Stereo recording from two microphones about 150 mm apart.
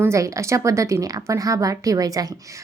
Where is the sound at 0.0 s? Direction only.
20° right (ahead or behind).